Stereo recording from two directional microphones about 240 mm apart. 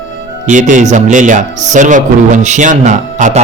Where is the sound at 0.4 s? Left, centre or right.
Right.